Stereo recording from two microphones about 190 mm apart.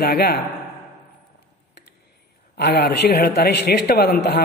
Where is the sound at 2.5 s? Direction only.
60° left (ahead or behind).